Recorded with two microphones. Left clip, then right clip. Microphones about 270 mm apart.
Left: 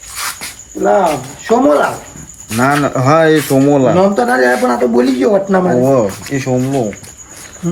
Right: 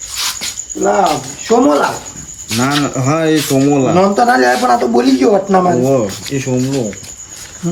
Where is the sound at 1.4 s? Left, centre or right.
Centre.